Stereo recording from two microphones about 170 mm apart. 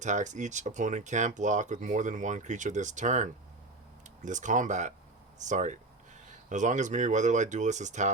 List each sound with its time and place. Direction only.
0.0 s speech: 45° right (ahead or behind)